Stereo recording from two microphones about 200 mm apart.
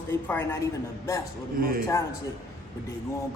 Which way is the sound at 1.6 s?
45° right (ahead or behind).